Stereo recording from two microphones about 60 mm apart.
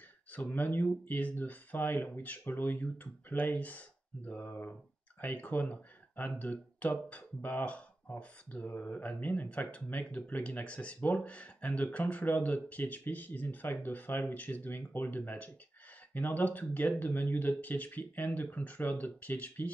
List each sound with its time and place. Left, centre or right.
0.4 s speech: left